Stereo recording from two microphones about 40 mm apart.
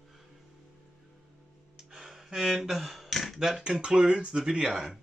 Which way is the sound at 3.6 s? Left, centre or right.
Right.